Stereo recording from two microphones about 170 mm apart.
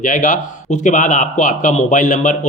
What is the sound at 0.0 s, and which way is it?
Speech, 50° left (ahead or behind).